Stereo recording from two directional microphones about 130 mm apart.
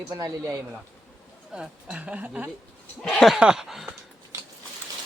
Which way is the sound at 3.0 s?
Centre (ahead or behind).